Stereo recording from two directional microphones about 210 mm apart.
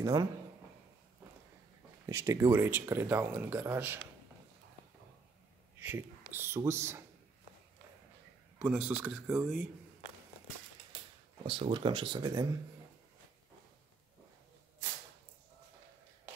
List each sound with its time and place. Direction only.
0.0 s speech: 15° right (ahead or behind)
2.0 s speech: 15° right (ahead or behind)
5.8 s speech: 10° right (ahead or behind)
8.5 s speech: 5° right (ahead or behind)
11.4 s speech: 25° right (ahead or behind)